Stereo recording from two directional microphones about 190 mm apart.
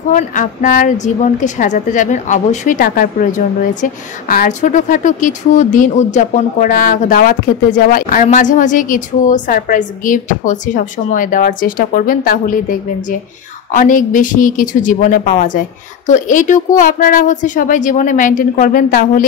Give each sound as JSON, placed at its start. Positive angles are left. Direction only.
{"t": 0.1, "sound": "a woman's voice", "side_deg": 40}